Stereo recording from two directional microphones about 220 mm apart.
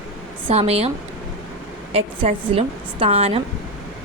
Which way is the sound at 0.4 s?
25° right (ahead or behind).